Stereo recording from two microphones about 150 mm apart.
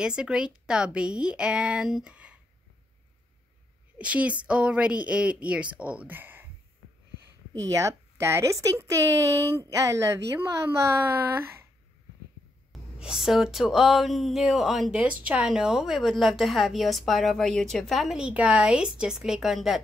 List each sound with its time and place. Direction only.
0.0 s a woman's voice: 5° right (ahead or behind)
4.0 s a woman's voice: 10° right (ahead or behind)
7.7 s a woman's voice: 20° right (ahead or behind)
13.0 s a woman's voice: centre (ahead or behind)